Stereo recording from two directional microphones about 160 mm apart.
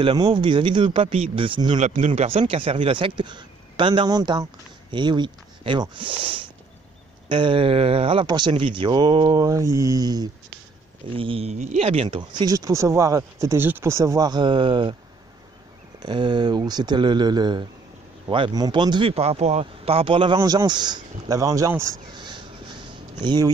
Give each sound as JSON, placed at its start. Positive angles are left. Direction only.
{"t": 0.0, "sound": "speech", "side_deg": -30}
{"t": 1.8, "sound": "speech", "side_deg": -50}
{"t": 2.2, "sound": "speech", "side_deg": -35}
{"t": 11.1, "sound": "speech", "side_deg": -35}
{"t": 16.0, "sound": "speech", "side_deg": -30}
{"t": 22.1, "sound": "a sound", "side_deg": -30}
{"t": 23.2, "sound": "speech", "side_deg": -30}